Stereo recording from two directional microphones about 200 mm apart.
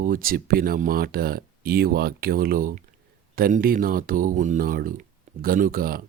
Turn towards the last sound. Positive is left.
turn(degrees=-45)  # may be behind; listen again after turning